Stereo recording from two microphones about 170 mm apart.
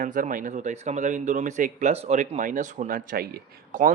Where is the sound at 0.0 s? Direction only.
50° right (ahead or behind).